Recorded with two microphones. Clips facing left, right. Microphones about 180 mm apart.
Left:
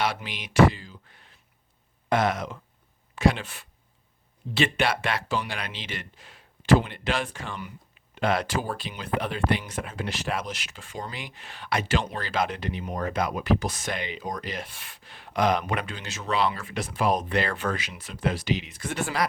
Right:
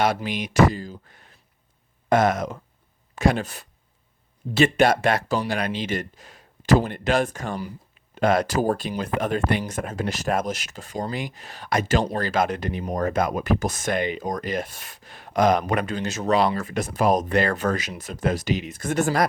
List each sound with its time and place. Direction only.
0.0 s speech: 45° right (ahead or behind)